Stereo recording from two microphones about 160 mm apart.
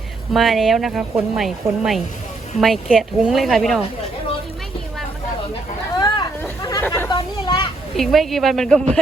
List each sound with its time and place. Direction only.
0.3 s speech: centre (ahead or behind)
6.0 s hubbub: 30° left (ahead or behind)
6.6 s chatter: 25° left (ahead or behind)
6.8 s speech: 15° left (ahead or behind)
7.1 s a sound: 30° left (ahead or behind)
7.9 s speech: centre (ahead or behind)